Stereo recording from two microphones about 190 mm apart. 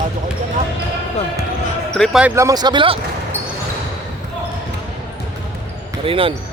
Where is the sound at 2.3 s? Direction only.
15° right (ahead or behind).